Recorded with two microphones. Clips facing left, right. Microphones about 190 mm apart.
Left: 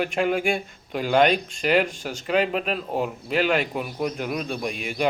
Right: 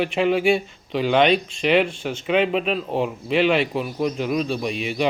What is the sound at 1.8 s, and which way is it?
Speech, 40° left (ahead or behind).